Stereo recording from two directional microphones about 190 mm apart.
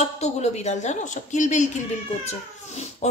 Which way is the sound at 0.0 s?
35° left (ahead or behind).